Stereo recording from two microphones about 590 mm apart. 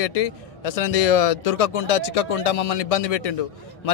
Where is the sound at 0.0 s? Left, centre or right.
Left.